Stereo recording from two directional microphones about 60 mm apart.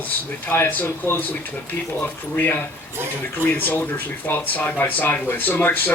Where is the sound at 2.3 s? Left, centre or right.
Left.